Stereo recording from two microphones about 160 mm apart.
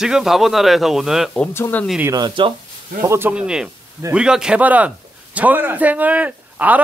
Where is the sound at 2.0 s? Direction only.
25° right (ahead or behind).